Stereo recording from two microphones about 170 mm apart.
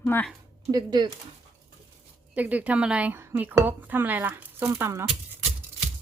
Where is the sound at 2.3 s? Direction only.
10° right (ahead or behind).